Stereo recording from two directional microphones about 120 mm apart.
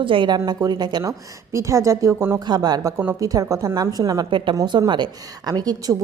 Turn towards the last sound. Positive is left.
turn(degrees=-30)  # may be behind; listen again after turning